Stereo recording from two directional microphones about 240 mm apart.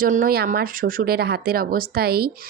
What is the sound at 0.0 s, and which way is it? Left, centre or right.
Speech, right.